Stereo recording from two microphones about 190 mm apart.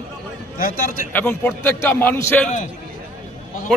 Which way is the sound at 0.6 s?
45° left (ahead or behind).